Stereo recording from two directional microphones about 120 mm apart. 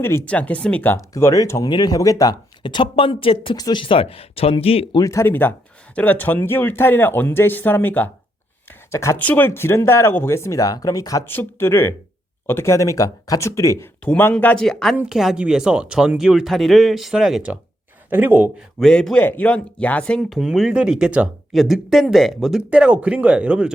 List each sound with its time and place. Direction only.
0.0 s speech: 20° left (ahead or behind)
0.3 s speech: 10° left (ahead or behind)
1.1 s speech: 30° left (ahead or behind)
2.6 s speech: 45° left (ahead or behind)
4.9 s speech: 25° left (ahead or behind)
9.1 s speech: 15° left (ahead or behind); by 11.2 s 30° left (ahead or behind)
11.3 s speech: 20° left (ahead or behind); by 18.5 s 15° right (ahead or behind)
18.8 s speech: 5° left (ahead or behind)
20.3 s speech: 5° right (ahead or behind)